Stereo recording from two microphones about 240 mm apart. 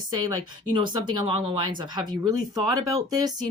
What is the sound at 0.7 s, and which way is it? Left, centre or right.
Speech, centre.